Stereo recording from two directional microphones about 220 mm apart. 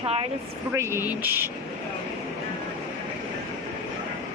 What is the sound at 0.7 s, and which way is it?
Speech, 10° right (ahead or behind).